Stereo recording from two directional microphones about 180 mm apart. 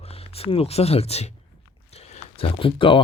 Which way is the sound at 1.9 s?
35° left (ahead or behind).